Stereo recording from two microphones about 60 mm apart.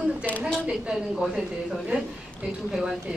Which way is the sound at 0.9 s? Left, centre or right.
Centre.